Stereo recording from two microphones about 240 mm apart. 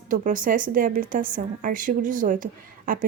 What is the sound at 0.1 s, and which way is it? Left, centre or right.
Speech, right.